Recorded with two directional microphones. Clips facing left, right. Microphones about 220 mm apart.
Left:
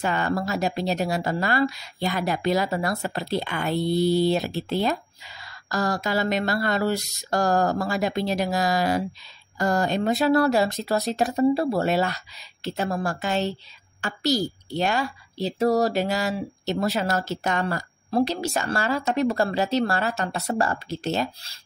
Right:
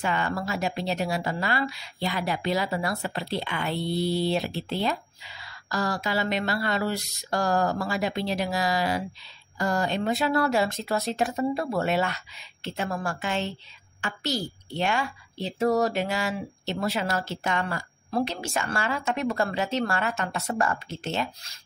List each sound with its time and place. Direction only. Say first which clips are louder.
0.0 s a woman's voice: left 3 dB; 40° left (ahead or behind)